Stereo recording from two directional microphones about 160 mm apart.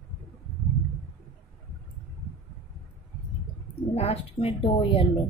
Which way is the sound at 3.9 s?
40° left (ahead or behind).